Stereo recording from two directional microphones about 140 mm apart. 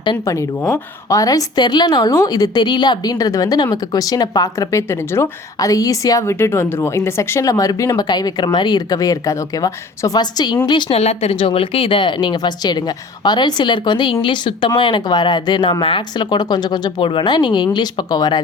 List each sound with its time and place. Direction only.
0.3 s a woman's voice: 25° left (ahead or behind)
10.9 s speech: 50° left (ahead or behind); by 18.4 s 30° left (ahead or behind)